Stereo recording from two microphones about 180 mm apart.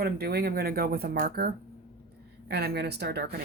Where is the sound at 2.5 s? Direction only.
65° right (ahead or behind).